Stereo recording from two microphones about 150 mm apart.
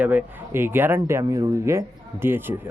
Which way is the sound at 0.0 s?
10° right (ahead or behind).